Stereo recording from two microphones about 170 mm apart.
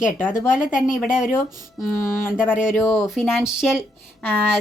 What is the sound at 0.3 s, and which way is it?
Speech, 50° left (ahead or behind).